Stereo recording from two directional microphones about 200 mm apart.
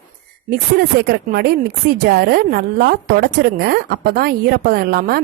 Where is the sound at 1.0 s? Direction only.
50° right (ahead or behind).